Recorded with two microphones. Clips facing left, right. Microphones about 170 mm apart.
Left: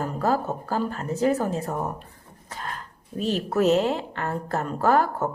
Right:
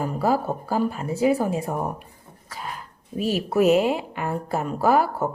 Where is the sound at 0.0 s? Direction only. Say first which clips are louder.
Right 2 dB; 10° right (ahead or behind).